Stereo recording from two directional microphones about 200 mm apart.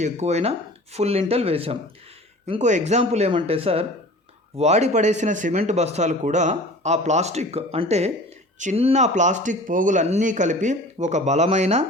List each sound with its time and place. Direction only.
0.0 s speech: 35° right (ahead or behind)